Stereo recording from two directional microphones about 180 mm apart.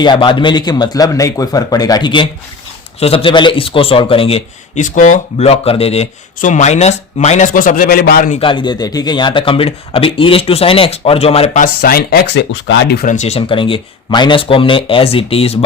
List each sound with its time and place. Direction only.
0.0 s a man's voice: 25° left (ahead or behind); by 8.3 s 55° left (ahead or behind)
8.3 s a man's voice: 30° left (ahead or behind)
11.6 s speech: 55° left (ahead or behind)
13.1 s speech: 35° left (ahead or behind)